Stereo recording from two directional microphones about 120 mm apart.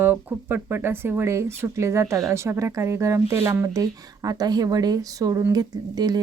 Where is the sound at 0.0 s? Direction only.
15° right (ahead or behind).